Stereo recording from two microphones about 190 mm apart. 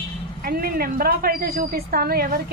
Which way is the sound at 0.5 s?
50° right (ahead or behind).